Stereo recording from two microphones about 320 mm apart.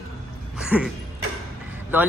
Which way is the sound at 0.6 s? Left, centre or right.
Centre.